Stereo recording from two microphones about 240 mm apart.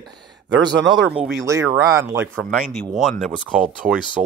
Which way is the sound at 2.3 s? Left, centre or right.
Centre.